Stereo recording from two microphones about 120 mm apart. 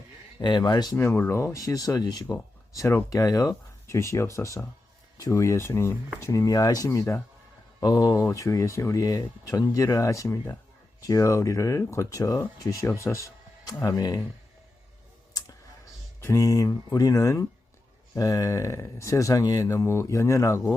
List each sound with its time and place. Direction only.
0.4 s speech: 35° left (ahead or behind)
0.9 s speech: 15° left (ahead or behind)
15.3 s clicking: 30° left (ahead or behind)
16.2 s speech: 25° left (ahead or behind)